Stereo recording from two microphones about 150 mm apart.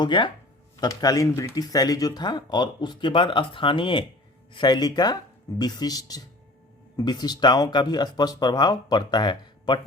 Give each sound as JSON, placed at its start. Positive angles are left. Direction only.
{"t": 0.0, "sound": "speech", "side_deg": 30}